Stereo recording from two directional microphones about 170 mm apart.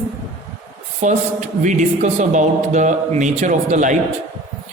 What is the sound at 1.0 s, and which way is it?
Speech, 45° right (ahead or behind).